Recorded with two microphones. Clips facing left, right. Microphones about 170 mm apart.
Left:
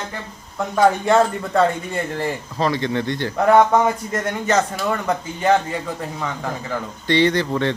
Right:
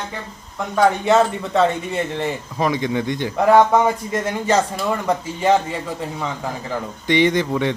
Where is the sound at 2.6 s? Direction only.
15° right (ahead or behind).